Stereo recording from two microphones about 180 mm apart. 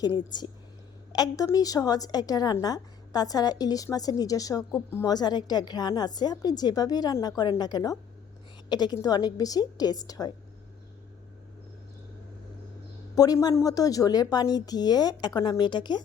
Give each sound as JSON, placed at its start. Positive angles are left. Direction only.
{"t": 0.3, "sound": "a woman's voice", "side_deg": 25}
{"t": 13.1, "sound": "a woman's voice", "side_deg": 20}